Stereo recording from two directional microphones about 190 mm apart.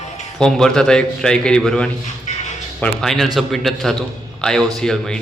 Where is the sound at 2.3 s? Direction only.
35° left (ahead or behind).